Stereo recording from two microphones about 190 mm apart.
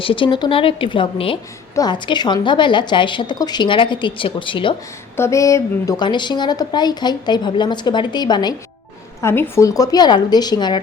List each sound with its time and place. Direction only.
0.0 s a woman's voice: 25° left (ahead or behind)
5.1 s a woman's voice: 15° left (ahead or behind)